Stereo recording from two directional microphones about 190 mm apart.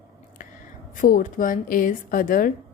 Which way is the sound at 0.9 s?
45° left (ahead or behind).